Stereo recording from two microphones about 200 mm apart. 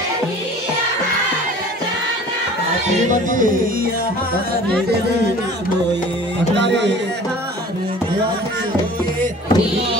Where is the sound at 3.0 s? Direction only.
40° right (ahead or behind).